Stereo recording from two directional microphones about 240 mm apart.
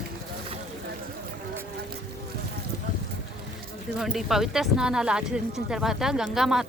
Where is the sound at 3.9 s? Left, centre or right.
Centre.